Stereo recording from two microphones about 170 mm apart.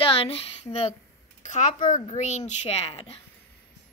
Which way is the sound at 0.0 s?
35° left (ahead or behind).